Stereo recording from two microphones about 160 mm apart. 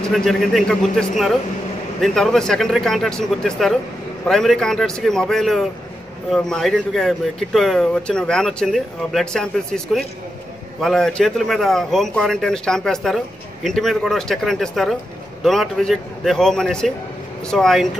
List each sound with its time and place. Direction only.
0.1 s speech: centre (ahead or behind)